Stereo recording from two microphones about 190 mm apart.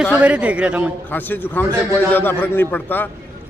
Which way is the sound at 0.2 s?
5° right (ahead or behind).